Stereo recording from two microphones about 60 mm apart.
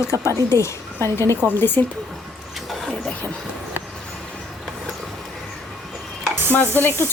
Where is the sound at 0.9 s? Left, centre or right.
Left.